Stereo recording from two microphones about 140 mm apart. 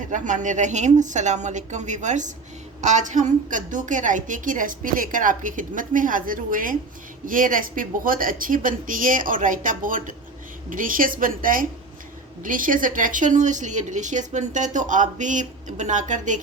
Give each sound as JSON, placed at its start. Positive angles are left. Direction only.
{"t": 0.1, "sound": "a woman's voice", "side_deg": -65}
{"t": 12.4, "sound": "a woman's voice", "side_deg": -75}